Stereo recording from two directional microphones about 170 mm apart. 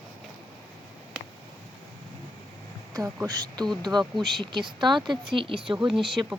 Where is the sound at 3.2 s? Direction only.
25° right (ahead or behind).